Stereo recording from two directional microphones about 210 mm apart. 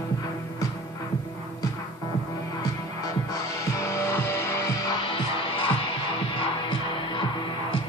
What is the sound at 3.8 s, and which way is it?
Music, 15° left (ahead or behind).